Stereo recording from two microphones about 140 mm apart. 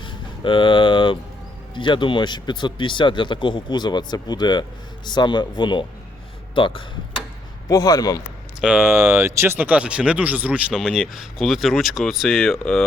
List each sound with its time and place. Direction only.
0.0 s a sound: 35° left (ahead or behind)
1.7 s speech: 35° left (ahead or behind)
7.7 s a man's voice: 25° left (ahead or behind)
8.6 s speech: 10° right (ahead or behind)